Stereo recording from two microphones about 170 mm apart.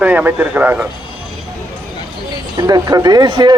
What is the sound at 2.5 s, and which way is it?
Speech, 25° right (ahead or behind).